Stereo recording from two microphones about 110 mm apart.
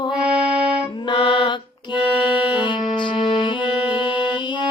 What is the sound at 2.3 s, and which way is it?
Music, 10° right (ahead or behind).